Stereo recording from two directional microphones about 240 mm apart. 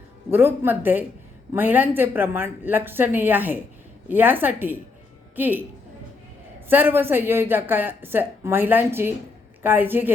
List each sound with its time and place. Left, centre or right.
0.3 s speech: centre
6.7 s speech: centre